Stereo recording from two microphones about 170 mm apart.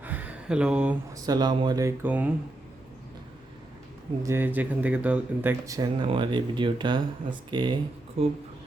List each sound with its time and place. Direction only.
0.0 s a sound: 10° right (ahead or behind)
1.1 s speech: 25° right (ahead or behind)
2.0 s speech: 10° right (ahead or behind)
4.2 s speech: 15° right (ahead or behind)